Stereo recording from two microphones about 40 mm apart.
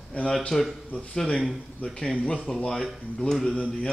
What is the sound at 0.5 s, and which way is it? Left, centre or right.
Speech, centre.